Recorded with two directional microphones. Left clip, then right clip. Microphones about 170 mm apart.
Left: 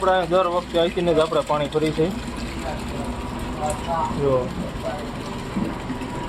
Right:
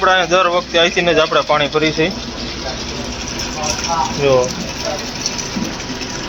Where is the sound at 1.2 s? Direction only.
20° right (ahead or behind).